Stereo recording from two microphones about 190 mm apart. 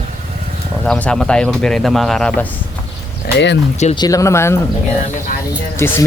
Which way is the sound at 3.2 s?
70° left (ahead or behind).